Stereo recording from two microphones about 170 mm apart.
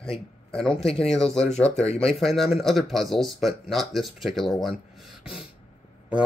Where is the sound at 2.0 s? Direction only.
Centre (ahead or behind).